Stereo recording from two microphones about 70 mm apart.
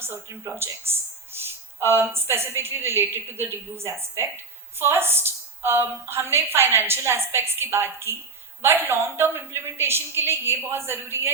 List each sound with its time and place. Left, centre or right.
0.0 s a woman's voice: right